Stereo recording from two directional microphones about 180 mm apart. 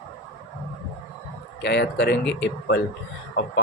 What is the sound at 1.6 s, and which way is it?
Speech, 70° left (ahead or behind).